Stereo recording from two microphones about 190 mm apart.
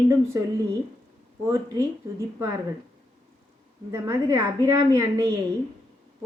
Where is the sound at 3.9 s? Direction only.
15° right (ahead or behind).